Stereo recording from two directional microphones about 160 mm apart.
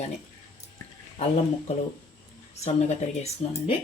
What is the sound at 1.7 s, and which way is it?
Speech, 40° left (ahead or behind).